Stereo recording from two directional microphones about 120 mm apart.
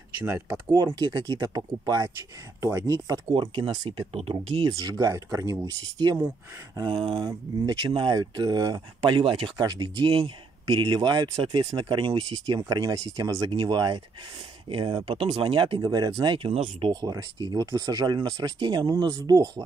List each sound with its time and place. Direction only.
0.7 s speech: 35° right (ahead or behind)
3.3 s speech: 45° right (ahead or behind)
4.1 s speech: 55° right (ahead or behind); by 9.1 s 35° right (ahead or behind)
9.1 s speech: 50° right (ahead or behind)
9.6 s speech: 35° right (ahead or behind)
10.0 s speech: 50° right (ahead or behind); by 16.3 s 35° right (ahead or behind)
16.4 s speech: 50° right (ahead or behind)
16.9 s speech: 30° right (ahead or behind)